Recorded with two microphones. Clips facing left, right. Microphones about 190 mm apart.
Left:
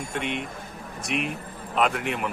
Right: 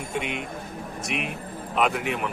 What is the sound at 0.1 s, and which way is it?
Speech, centre (ahead or behind).